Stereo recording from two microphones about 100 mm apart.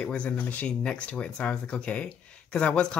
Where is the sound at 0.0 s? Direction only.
10° left (ahead or behind).